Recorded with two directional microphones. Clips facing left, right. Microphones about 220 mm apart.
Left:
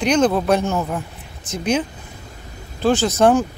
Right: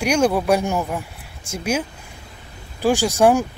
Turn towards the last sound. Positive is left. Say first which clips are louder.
# left 1 dB
turn(degrees=-10)  # may be behind; listen again after turning